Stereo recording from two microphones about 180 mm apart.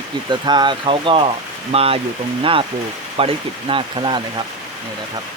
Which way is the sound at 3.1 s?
30° right (ahead or behind).